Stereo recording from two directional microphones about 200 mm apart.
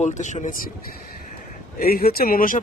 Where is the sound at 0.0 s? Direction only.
35° left (ahead or behind).